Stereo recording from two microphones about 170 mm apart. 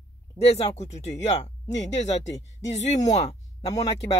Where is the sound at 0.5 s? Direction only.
40° left (ahead or behind).